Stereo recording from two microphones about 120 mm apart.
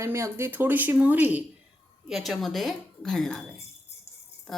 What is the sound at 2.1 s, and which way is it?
A woman's voice, centre (ahead or behind).